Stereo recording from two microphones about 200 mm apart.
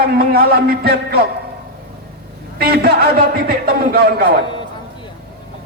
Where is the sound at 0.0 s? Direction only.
50° right (ahead or behind).